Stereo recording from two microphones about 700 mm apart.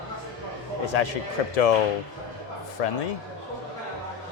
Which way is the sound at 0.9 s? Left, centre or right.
Left.